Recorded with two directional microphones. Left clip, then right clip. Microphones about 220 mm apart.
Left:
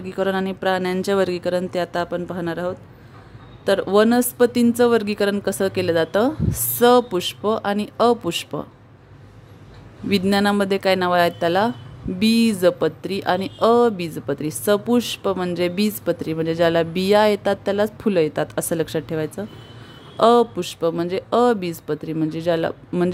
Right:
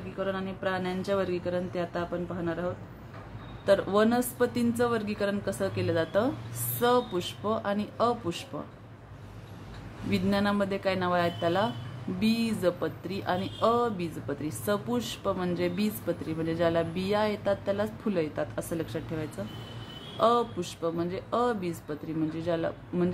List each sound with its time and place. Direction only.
0.1 s speech: 50° left (ahead or behind)
10.0 s speech: 40° left (ahead or behind)